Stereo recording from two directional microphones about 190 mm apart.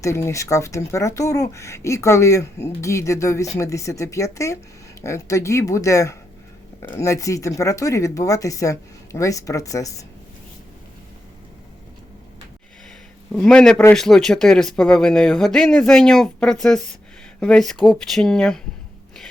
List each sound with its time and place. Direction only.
0.0 s speech: 15° left (ahead or behind)
13.3 s speech: 5° left (ahead or behind)